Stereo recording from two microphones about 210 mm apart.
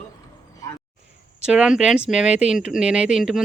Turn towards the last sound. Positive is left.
turn(degrees=0)  # may be behind; listen again after turning